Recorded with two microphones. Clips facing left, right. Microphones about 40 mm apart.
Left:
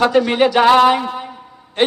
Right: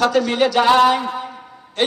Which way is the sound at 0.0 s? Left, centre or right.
Left.